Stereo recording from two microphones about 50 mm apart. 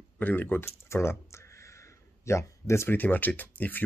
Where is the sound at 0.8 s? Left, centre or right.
Left.